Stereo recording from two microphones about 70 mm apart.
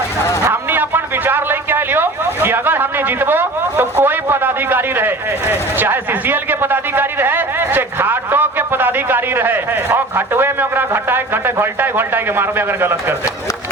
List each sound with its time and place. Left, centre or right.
0.5 s a man's voice: right